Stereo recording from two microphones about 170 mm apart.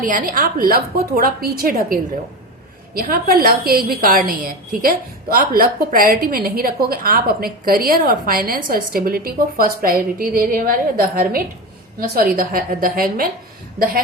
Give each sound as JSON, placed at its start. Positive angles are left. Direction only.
{"t": 0.0, "sound": "a woman's voice", "side_deg": -50}